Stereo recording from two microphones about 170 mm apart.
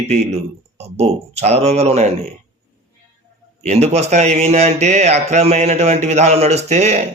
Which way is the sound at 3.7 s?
40° right (ahead or behind).